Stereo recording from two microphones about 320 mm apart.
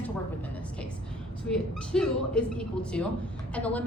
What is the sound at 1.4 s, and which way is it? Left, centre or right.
A woman's voice, centre.